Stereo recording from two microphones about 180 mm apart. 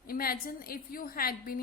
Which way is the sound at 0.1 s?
55° left (ahead or behind).